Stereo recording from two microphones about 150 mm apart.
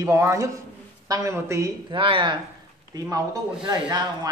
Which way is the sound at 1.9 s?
35° right (ahead or behind).